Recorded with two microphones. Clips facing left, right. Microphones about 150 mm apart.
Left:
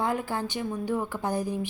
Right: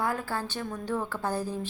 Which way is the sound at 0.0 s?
20° left (ahead or behind).